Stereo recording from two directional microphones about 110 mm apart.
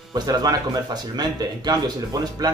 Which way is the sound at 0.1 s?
35° right (ahead or behind).